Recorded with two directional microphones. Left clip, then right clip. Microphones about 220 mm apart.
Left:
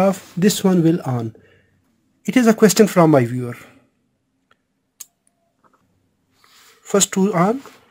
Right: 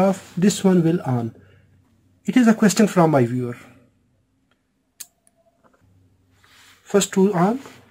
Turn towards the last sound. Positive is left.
turn(degrees=45)  # may be behind; listen again after turning